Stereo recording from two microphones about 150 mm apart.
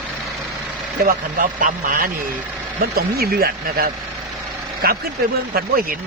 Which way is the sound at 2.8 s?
90° right.